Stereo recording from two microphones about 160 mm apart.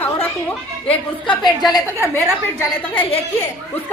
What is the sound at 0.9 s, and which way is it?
Speech, 30° left (ahead or behind).